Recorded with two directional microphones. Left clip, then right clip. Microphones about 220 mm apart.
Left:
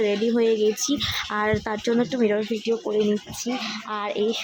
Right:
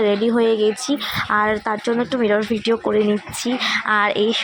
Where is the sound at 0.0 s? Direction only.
5° left (ahead or behind).